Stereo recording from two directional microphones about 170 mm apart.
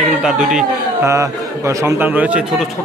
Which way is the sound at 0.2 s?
Centre (ahead or behind).